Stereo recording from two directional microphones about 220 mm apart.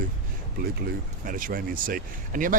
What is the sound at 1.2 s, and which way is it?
Speech, 40° right (ahead or behind).